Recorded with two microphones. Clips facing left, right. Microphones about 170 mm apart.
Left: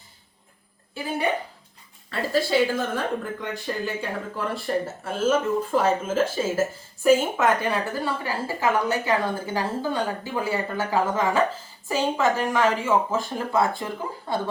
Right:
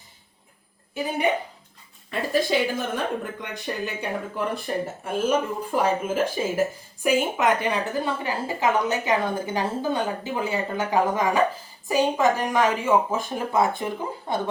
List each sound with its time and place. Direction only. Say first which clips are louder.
2.0 s speech: right 1 dB; 15° right (ahead or behind)